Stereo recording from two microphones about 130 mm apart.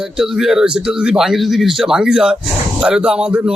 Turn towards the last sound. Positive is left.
turn(degrees=-5)  # may be behind; listen again after turning